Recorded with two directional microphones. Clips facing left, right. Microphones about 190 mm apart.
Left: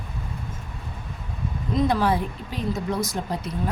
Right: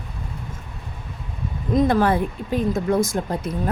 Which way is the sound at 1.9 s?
55° right (ahead or behind).